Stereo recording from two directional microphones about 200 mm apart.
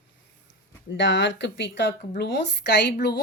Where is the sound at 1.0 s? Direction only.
65° left (ahead or behind).